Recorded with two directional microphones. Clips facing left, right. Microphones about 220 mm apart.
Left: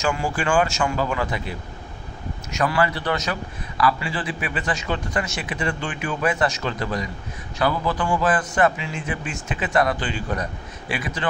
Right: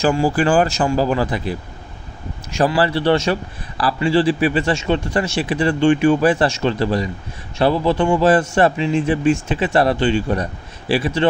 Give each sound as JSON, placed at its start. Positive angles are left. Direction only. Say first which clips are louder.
{"t": 0.0, "sound": "a man's voice", "louder": "right 8 dB", "side_deg": -35}